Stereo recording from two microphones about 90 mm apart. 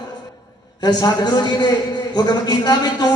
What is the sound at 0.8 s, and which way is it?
Speech, 45° left (ahead or behind).